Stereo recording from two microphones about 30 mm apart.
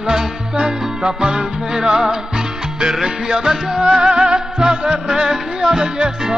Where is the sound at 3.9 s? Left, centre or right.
Right.